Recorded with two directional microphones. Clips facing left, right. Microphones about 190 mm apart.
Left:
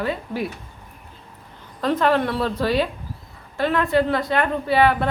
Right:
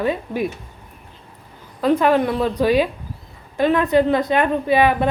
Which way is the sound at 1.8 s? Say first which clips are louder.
Right 3 dB; 10° right (ahead or behind).